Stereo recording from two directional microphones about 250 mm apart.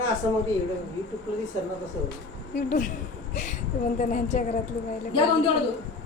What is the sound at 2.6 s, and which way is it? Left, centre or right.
Speech, left.